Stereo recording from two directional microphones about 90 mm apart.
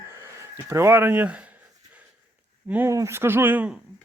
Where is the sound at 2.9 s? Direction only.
30° right (ahead or behind).